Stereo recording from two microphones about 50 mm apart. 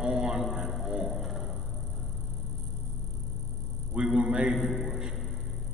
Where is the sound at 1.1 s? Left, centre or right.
Centre.